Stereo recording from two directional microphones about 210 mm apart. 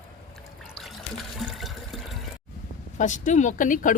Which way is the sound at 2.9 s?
35° left (ahead or behind).